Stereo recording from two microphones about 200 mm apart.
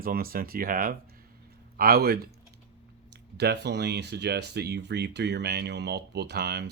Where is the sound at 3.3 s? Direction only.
55° right (ahead or behind).